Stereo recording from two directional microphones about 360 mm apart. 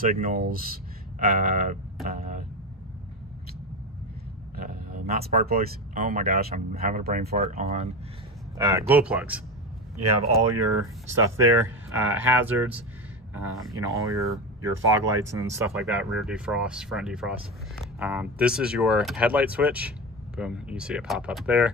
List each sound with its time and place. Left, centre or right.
0.0 s speech: right
4.6 s speech: right; by 9.4 s centre
11.1 s speech: centre